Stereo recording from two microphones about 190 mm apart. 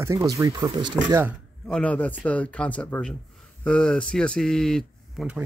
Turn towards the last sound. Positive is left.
turn(degrees=0)  # may be behind; listen again after turning